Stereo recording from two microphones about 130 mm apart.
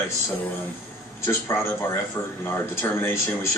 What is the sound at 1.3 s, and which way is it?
A man's voice, 20° left (ahead or behind).